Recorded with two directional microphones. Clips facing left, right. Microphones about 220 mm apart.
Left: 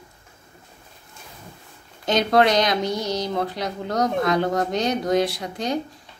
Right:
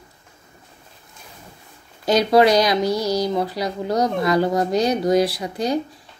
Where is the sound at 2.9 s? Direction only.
20° left (ahead or behind).